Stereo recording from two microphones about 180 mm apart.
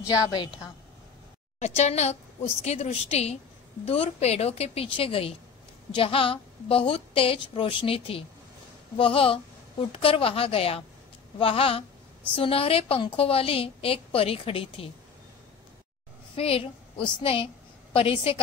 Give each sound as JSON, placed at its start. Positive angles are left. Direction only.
{"t": 0.1, "sound": "a woman's voice", "side_deg": 20}
{"t": 1.6, "sound": "a woman's voice", "side_deg": 35}
{"t": 16.3, "sound": "a woman's voice", "side_deg": 30}